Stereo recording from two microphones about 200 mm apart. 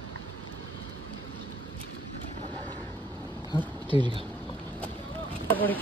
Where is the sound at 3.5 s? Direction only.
25° right (ahead or behind).